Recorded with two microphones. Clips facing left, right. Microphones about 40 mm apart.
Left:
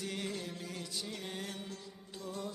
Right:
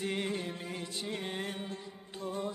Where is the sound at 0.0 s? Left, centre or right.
Right.